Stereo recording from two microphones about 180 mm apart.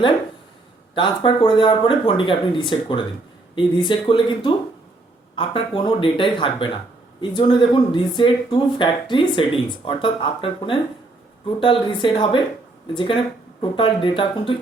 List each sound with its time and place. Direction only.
0.9 s speech: 25° left (ahead or behind)